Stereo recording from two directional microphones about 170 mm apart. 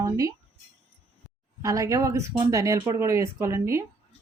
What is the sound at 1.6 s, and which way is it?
Speech, 20° right (ahead or behind).